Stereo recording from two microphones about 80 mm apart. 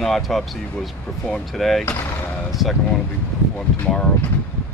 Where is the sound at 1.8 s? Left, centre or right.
Left.